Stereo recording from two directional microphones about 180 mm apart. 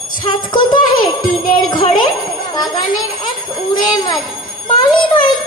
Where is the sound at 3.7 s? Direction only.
25° left (ahead or behind).